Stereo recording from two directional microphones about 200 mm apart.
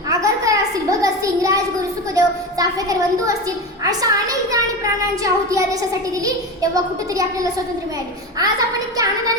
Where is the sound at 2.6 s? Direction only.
20° right (ahead or behind).